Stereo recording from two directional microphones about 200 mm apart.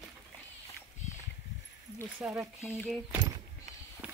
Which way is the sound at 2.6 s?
10° left (ahead or behind).